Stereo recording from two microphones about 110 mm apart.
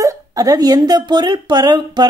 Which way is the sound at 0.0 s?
30° right (ahead or behind).